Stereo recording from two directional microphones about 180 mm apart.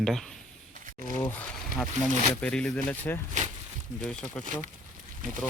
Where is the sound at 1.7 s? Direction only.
5° left (ahead or behind).